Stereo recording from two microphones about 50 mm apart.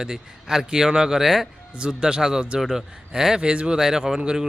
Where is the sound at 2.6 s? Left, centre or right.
Centre.